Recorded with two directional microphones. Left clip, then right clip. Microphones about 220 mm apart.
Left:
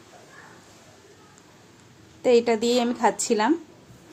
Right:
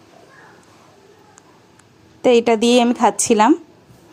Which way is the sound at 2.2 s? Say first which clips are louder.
Right 6 dB; 35° right (ahead or behind).